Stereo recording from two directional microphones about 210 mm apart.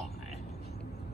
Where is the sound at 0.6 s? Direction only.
50° left (ahead or behind).